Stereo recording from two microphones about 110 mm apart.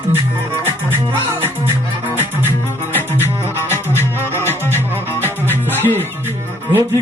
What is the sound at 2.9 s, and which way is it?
Music, 20° left (ahead or behind).